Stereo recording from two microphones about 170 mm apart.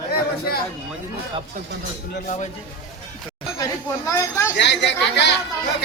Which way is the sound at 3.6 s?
20° left (ahead or behind).